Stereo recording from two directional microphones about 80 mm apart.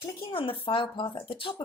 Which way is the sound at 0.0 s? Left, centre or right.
Left.